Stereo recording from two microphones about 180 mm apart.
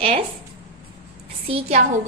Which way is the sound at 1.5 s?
30° right (ahead or behind).